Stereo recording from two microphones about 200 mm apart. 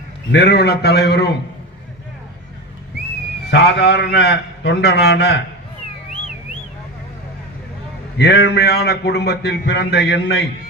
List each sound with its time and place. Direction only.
0.3 s a man's voice: 55° left (ahead or behind)
3.5 s a man's voice: 55° left (ahead or behind)
8.2 s a man's voice: 55° left (ahead or behind)